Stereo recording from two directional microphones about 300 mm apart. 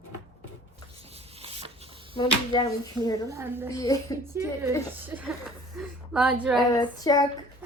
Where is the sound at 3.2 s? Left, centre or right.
Centre.